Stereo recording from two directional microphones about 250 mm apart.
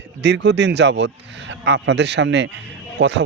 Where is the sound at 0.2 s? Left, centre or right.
Right.